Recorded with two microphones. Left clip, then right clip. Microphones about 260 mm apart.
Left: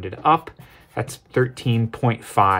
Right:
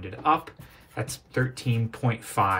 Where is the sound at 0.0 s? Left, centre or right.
Left.